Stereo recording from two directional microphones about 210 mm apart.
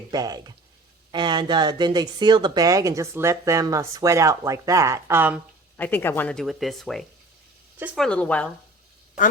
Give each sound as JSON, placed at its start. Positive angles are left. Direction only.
{"t": 0.1, "sound": "speech", "side_deg": -20}
{"t": 5.7, "sound": "speech", "side_deg": 10}